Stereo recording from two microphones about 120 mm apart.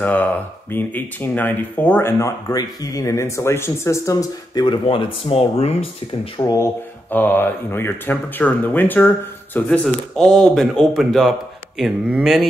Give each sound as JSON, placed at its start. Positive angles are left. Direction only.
{"t": 0.0, "sound": "speech", "side_deg": 15}
{"t": 4.8, "sound": "speech", "side_deg": 50}
{"t": 6.3, "sound": "speech", "side_deg": 30}
{"t": 7.1, "sound": "speech", "side_deg": 15}